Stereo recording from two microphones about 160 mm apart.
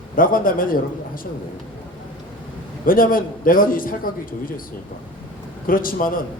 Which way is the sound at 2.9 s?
60° left (ahead or behind).